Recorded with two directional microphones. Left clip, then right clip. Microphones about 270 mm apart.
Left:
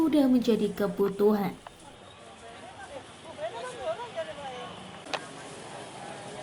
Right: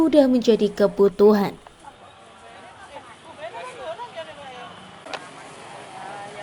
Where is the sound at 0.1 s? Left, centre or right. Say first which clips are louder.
Right 8 dB; right.